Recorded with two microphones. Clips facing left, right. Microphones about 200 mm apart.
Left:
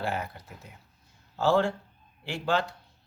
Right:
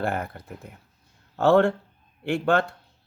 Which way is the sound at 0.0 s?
55° right (ahead or behind).